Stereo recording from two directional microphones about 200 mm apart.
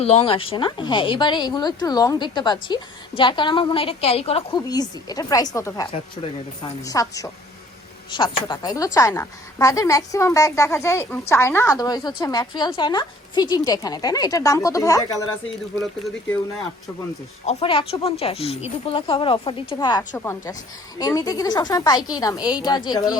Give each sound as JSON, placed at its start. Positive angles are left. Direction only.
{"t": 0.0, "sound": "speech", "side_deg": 30}
{"t": 4.7, "sound": "speech", "side_deg": 20}
{"t": 6.2, "sound": "speech", "side_deg": 30}
{"t": 6.8, "sound": "a woman's voice", "side_deg": 15}
{"t": 17.4, "sound": "a woman's voice", "side_deg": 30}